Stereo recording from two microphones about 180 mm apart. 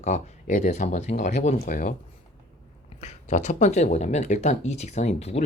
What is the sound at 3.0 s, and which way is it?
Speech, 40° left (ahead or behind).